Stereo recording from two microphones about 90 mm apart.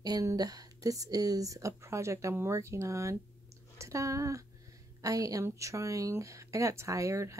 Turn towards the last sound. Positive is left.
turn(degrees=-35)  # may be behind; listen again after turning